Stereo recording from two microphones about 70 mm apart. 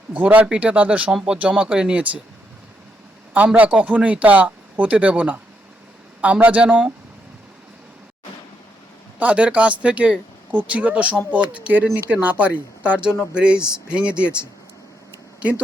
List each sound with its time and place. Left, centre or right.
0.1 s speech: right
3.3 s speech: centre
9.1 s speech: centre
15.4 s speech: centre